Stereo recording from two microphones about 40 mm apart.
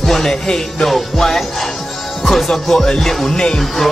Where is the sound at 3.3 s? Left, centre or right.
Centre.